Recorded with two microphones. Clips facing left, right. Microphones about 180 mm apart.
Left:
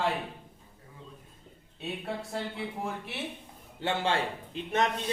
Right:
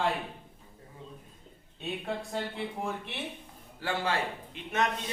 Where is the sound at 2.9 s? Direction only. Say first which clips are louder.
Even; 5° left (ahead or behind).